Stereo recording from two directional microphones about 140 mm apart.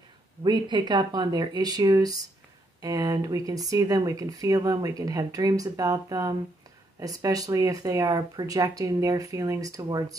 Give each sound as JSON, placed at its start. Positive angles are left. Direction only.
{"t": 0.4, "sound": "speech", "side_deg": -30}